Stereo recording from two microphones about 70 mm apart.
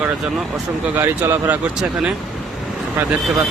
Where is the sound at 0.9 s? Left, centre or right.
Right.